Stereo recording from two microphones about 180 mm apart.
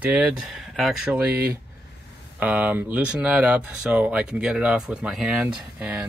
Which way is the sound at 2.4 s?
10° right (ahead or behind).